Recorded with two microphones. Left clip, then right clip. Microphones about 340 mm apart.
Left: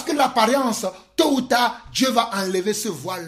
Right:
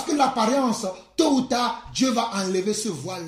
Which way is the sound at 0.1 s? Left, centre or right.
Left.